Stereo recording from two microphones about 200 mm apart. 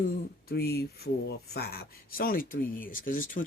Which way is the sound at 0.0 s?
50° left (ahead or behind).